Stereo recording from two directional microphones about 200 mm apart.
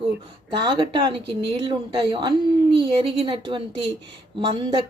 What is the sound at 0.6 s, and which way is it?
Speech, 25° right (ahead or behind).